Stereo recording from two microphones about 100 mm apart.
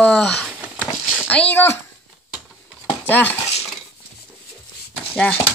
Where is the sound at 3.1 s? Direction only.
15° left (ahead or behind).